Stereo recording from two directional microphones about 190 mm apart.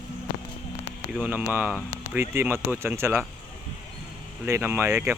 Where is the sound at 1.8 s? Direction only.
15° left (ahead or behind).